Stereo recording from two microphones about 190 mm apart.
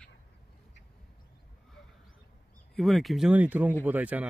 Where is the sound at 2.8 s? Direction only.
Centre (ahead or behind).